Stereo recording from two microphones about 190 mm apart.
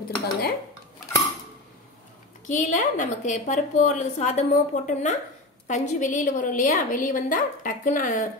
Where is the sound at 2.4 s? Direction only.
40° left (ahead or behind).